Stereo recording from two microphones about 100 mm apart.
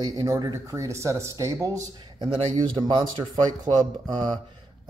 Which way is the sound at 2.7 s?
50° right (ahead or behind).